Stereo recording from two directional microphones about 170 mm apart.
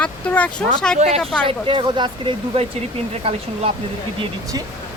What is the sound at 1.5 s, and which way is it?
Speech, 30° right (ahead or behind).